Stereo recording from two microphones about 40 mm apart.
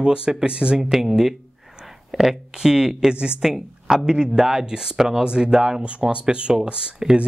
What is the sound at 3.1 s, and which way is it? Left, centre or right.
Speech, right.